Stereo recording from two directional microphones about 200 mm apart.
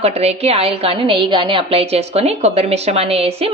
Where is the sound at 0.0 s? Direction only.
30° right (ahead or behind).